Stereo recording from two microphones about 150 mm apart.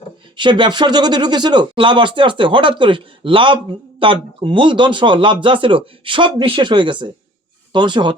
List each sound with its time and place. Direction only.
0.3 s speech: 30° right (ahead or behind)